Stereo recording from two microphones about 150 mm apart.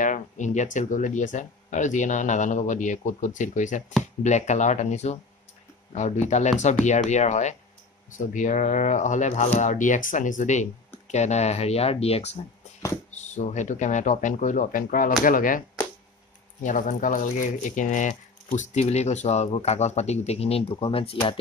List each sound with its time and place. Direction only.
0.0 s speech: 55° left (ahead or behind)
6.2 s speech: 50° left (ahead or behind)
16.6 s speech: 55° left (ahead or behind); by 21.4 s 40° left (ahead or behind)